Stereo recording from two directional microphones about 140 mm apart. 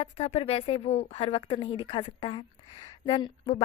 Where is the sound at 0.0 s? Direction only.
50° left (ahead or behind).